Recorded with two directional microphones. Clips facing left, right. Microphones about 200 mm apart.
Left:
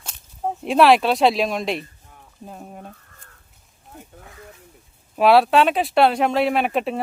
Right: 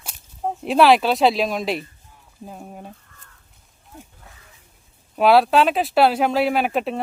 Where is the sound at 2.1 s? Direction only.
60° left (ahead or behind).